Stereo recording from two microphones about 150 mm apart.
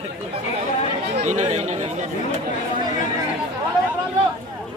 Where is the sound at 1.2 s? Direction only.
50° right (ahead or behind).